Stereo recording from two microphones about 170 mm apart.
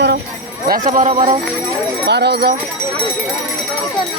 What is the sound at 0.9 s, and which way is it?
Speech, 45° right (ahead or behind).